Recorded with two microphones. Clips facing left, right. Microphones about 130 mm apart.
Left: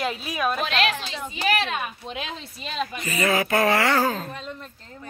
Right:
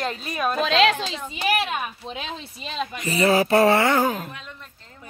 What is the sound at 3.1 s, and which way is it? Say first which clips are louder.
Speech: right 5 dB; 30° right (ahead or behind).